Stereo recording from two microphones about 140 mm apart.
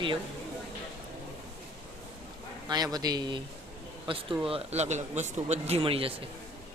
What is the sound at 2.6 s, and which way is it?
Speech, 30° right (ahead or behind).